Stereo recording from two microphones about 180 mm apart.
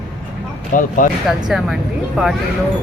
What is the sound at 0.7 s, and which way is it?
Speech, 50° left (ahead or behind).